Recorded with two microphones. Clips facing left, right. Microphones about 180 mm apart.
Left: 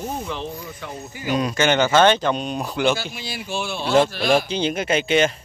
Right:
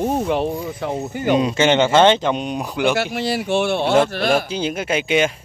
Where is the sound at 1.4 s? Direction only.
25° right (ahead or behind).